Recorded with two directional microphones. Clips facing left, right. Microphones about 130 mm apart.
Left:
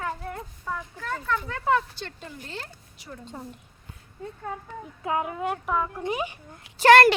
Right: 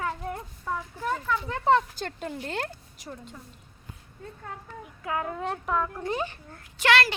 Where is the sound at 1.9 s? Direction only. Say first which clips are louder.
Right 5 dB; 50° right (ahead or behind).